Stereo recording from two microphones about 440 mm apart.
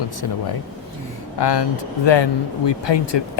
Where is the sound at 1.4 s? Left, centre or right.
Left.